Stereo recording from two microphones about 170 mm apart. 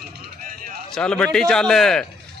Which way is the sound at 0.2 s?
55° right (ahead or behind).